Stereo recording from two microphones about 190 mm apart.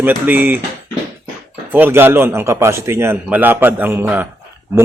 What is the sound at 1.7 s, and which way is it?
A man's voice, 10° right (ahead or behind).